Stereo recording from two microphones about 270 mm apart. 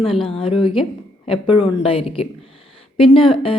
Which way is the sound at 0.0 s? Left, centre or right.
Centre.